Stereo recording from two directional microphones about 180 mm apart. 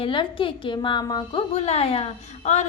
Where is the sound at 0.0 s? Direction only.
30° left (ahead or behind).